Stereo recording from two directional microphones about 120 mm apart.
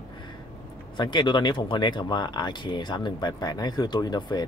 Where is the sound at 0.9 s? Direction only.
40° left (ahead or behind).